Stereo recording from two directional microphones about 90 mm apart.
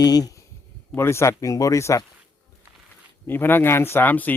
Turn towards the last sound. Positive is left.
turn(degrees=20)  # may be behind; listen again after turning